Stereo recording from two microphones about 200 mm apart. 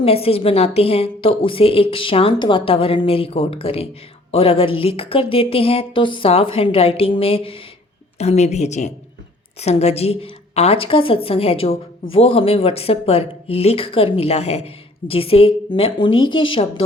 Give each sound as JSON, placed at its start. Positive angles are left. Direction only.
{"t": 0.0, "sound": "a woman's voice", "side_deg": 30}